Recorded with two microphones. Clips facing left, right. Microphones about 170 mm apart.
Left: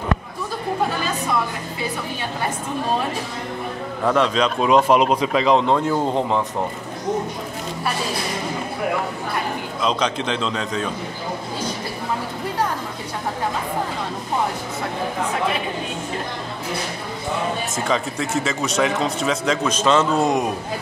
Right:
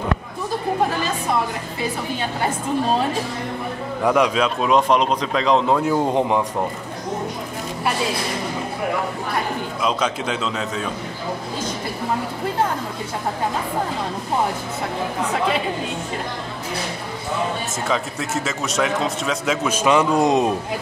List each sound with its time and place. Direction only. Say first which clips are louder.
4.0 s a man's voice: right 1 dB; 10° right (ahead or behind)
6.1 s a man's voice: right 2 dB; 15° right (ahead or behind)
9.8 s a man's voice: left 1 dB; 5° right (ahead or behind)
17.8 s a man's voice: left 1 dB; centre (ahead or behind); by 20.4 s 20° right (ahead or behind)